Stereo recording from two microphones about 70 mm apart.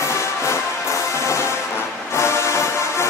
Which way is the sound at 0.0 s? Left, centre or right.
Left.